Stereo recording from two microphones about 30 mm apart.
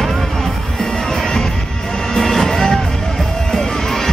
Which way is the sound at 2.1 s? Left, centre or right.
Centre.